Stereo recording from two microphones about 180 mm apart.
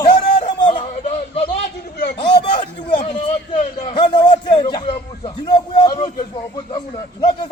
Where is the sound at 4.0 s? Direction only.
25° left (ahead or behind).